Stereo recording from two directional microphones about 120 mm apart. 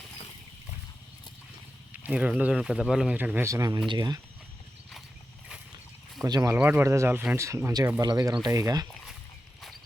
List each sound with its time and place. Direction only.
1.9 s speech: 10° right (ahead or behind)
3.2 s speech: 15° right (ahead or behind); by 4.2 s 35° right (ahead or behind)
6.2 s speech: 35° right (ahead or behind)
6.5 s speech: 15° right (ahead or behind)